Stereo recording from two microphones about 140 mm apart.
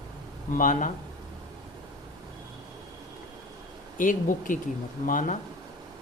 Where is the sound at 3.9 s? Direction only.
70° left (ahead or behind).